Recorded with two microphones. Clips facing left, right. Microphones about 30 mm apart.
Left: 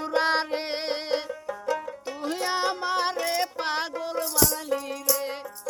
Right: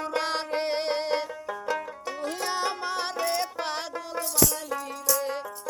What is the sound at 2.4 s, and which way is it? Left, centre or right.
Music, left.